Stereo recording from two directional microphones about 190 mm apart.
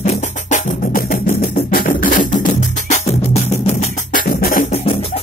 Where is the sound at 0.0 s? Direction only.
40° left (ahead or behind).